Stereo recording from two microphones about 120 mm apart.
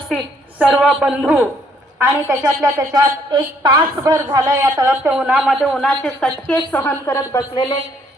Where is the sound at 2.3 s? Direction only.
30° right (ahead or behind).